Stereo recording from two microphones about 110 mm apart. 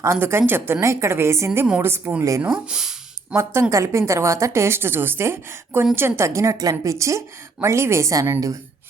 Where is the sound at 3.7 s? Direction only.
25° right (ahead or behind).